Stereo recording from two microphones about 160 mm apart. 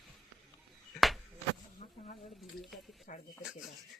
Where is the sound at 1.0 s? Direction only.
Centre (ahead or behind).